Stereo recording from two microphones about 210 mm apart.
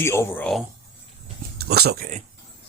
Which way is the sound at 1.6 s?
50° right (ahead or behind).